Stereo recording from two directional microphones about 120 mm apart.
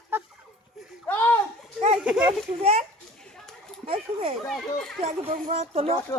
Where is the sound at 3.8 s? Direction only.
55° right (ahead or behind).